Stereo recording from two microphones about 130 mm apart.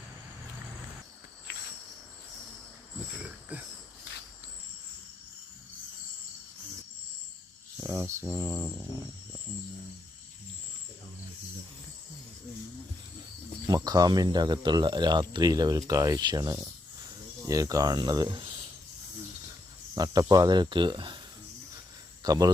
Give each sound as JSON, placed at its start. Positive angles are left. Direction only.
{"t": 3.5, "sound": "mantra", "side_deg": -10}
{"t": 7.8, "sound": "a sound", "side_deg": -20}
{"t": 8.2, "sound": "mantra", "side_deg": -15}
{"t": 13.7, "sound": "speech", "side_deg": -30}
{"t": 20.0, "sound": "speech", "side_deg": -30}
{"t": 22.2, "sound": "speech", "side_deg": -30}